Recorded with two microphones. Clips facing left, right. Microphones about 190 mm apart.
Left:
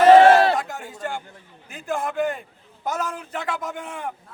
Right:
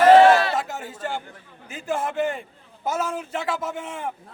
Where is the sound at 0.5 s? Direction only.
5° right (ahead or behind).